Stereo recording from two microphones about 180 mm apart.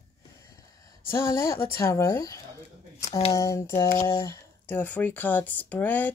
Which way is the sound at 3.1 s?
35° left (ahead or behind).